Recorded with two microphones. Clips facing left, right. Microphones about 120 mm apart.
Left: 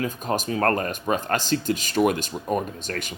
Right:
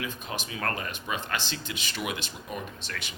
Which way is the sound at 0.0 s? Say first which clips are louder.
Left 9 dB; 45° left (ahead or behind).